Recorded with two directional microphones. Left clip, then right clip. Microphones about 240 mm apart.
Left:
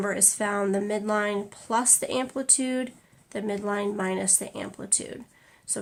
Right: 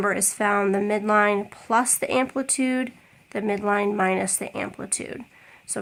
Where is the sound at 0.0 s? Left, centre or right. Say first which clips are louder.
Right 4 dB; right.